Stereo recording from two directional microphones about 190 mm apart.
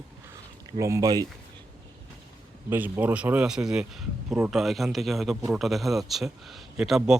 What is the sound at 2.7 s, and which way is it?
A man's voice, 10° right (ahead or behind).